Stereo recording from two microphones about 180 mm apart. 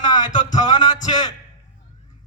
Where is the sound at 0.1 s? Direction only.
25° left (ahead or behind).